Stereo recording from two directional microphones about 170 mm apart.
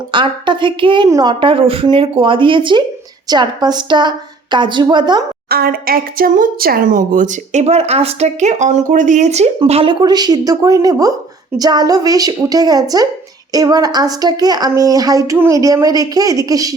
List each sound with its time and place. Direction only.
0.1 s a woman's voice: 30° right (ahead or behind)
5.5 s a woman's voice: 60° right (ahead or behind); by 16.7 s 20° right (ahead or behind)